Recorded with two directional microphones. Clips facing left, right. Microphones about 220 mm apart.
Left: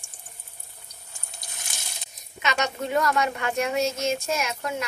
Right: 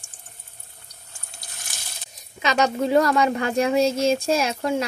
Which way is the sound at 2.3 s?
35° right (ahead or behind).